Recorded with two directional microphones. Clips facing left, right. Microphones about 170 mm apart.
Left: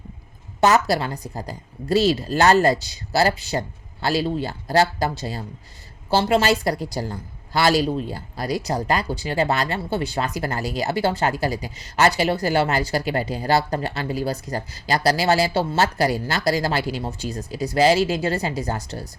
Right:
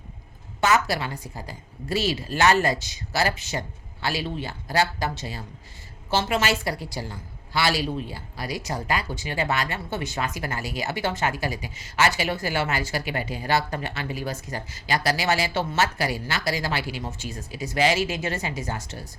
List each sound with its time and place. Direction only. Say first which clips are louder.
0.6 s speech: left 5 dB; 35° left (ahead or behind)